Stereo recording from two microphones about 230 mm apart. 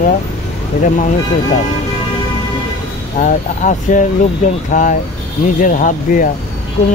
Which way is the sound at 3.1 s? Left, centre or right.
Left.